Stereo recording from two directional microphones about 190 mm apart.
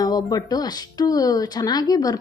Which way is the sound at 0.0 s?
20° left (ahead or behind).